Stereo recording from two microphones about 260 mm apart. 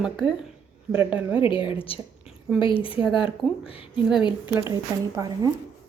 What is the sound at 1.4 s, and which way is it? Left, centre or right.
A woman's voice, centre.